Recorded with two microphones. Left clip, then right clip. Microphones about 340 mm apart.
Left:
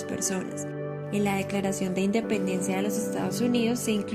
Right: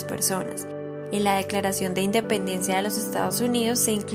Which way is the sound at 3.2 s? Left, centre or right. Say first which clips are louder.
Right 5 dB; right.